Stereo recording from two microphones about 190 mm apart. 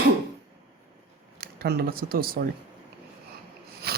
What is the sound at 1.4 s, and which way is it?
Speech, 55° right (ahead or behind).